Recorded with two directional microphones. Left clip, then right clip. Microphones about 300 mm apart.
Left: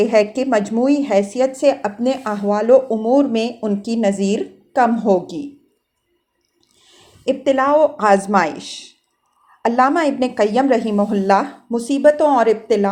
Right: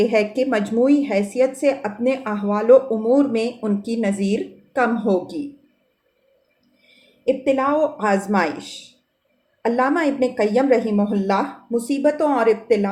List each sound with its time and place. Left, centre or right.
0.0 s speech: centre
7.3 s a woman's voice: left